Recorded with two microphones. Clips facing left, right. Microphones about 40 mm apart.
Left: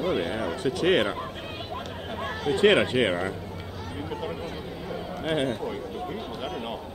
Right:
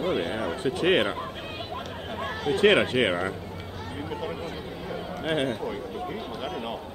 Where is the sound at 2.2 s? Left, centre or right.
Centre.